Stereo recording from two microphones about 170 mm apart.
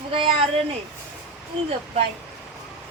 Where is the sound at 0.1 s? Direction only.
35° right (ahead or behind).